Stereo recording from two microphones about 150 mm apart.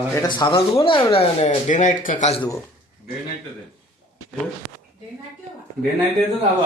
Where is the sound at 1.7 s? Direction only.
55° left (ahead or behind).